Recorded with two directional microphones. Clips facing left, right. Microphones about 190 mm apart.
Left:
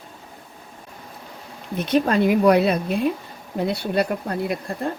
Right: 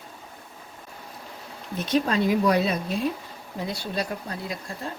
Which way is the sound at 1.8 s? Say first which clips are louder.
Left 4 dB; 60° left (ahead or behind).